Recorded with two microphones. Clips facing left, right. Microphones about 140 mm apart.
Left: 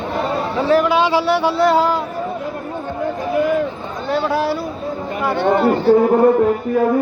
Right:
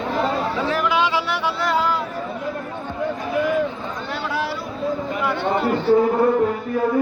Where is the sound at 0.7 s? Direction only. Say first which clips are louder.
Left 9 dB; 35° left (ahead or behind).